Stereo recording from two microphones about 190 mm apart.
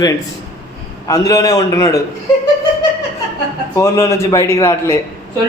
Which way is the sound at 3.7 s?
15° left (ahead or behind).